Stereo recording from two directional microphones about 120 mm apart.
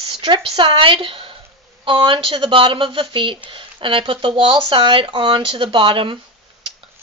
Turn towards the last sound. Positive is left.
turn(degrees=-45)  # may be behind; listen again after turning